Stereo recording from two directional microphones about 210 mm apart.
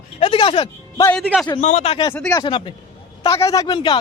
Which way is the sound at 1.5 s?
35° left (ahead or behind).